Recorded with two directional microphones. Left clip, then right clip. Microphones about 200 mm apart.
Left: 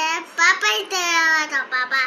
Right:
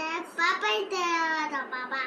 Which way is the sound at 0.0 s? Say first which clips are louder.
Left 10 dB; 5° right (ahead or behind).